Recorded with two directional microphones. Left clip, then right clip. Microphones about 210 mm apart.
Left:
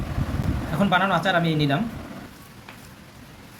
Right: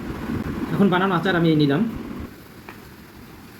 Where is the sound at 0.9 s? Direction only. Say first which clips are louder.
Left 1 dB; 55° left (ahead or behind).